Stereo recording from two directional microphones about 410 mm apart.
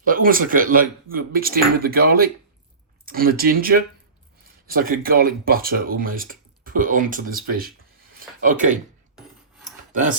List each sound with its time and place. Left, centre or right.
0.0 s speech: centre
9.9 s speech: centre